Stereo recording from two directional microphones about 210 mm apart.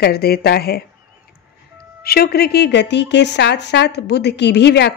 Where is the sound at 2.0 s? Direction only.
45° left (ahead or behind).